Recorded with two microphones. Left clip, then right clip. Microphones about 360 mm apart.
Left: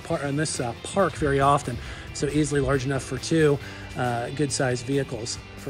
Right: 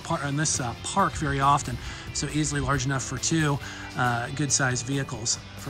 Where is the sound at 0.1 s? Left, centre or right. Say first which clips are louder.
Left 1 dB; centre.